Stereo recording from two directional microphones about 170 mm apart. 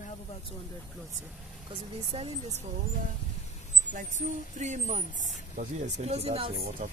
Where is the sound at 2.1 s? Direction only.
30° right (ahead or behind).